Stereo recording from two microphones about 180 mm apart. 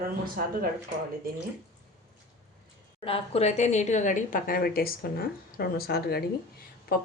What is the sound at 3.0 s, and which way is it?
A woman's voice, 35° left (ahead or behind).